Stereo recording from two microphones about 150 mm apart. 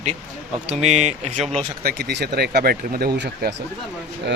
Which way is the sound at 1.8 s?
85° right.